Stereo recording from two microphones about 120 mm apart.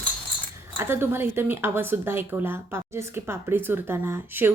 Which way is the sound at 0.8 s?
20° right (ahead or behind).